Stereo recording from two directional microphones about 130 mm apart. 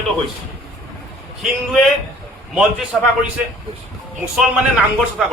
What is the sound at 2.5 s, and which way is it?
A man's voice, 5° right (ahead or behind).